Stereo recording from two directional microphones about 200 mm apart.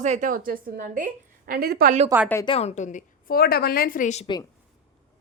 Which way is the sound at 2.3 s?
25° left (ahead or behind).